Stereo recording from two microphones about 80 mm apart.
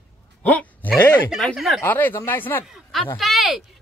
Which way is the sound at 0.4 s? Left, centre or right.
Centre.